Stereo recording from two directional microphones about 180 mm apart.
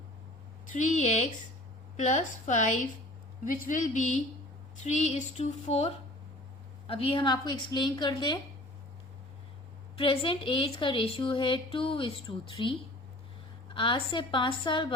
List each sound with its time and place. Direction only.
0.7 s a sound: 45° left (ahead or behind)
2.0 s a woman's voice: 40° left (ahead or behind)
4.8 s a sound: 40° left (ahead or behind)
6.8 s a woman's voice: 30° left (ahead or behind)
10.0 s a woman's voice: 30° left (ahead or behind)
13.7 s a woman's voice: 30° left (ahead or behind)